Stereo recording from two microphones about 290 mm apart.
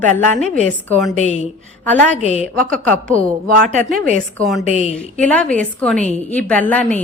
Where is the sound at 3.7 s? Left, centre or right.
Right.